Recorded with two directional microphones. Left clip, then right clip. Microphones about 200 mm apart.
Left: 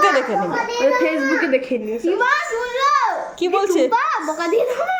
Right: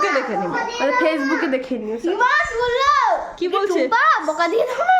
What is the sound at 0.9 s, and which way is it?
A child's voice, 15° right (ahead or behind).